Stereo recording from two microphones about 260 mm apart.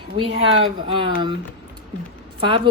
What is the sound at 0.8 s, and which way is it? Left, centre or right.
Speech, centre.